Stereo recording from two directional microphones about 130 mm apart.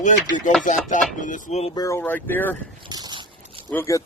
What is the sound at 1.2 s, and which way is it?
Speech, 85° left.